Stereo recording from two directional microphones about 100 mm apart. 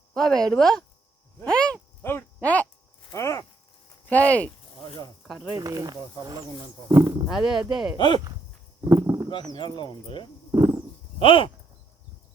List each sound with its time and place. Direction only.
0.1 s speech: 5° left (ahead or behind)
1.5 s a sound: 10° left (ahead or behind)
2.0 s speech: 25° left (ahead or behind)
3.1 s speech: 30° left (ahead or behind)
4.1 s speech: 15° left (ahead or behind)
5.5 s speech: 35° right (ahead or behind)
7.3 s speech: 5° right (ahead or behind)
7.9 s speech: 50° left (ahead or behind)
9.0 s a sound: 35° right (ahead or behind)
9.5 s speech: 45° left (ahead or behind)
10.5 s a sound: 30° right (ahead or behind)
11.2 s speech: 60° left (ahead or behind)